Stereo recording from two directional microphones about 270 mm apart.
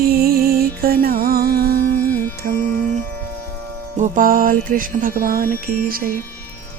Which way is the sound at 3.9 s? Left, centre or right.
Right.